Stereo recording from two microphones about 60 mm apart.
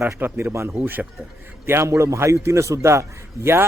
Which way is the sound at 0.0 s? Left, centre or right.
Right.